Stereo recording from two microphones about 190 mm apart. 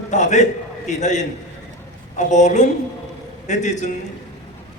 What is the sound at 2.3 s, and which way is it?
A man's voice, 40° left (ahead or behind).